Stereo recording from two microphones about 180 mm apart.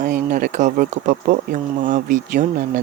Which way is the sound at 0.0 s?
45° right (ahead or behind).